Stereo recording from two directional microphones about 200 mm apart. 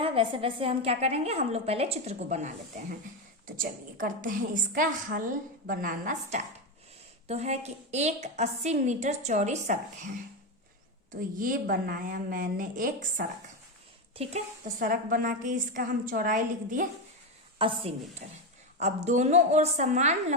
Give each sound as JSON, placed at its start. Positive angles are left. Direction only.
{"t": 0.0, "sound": "a woman's voice", "side_deg": -25}
{"t": 3.4, "sound": "a woman's voice", "side_deg": -45}
{"t": 11.1, "sound": "a woman's voice", "side_deg": -45}
{"t": 14.8, "sound": "a woman's voice", "side_deg": -45}
{"t": 17.6, "sound": "a woman's voice", "side_deg": -25}
{"t": 18.2, "sound": "a woman's voice", "side_deg": -40}